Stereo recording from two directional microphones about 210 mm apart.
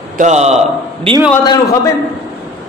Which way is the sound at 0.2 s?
30° right (ahead or behind).